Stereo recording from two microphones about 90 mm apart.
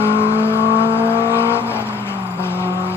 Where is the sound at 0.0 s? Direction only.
25° left (ahead or behind).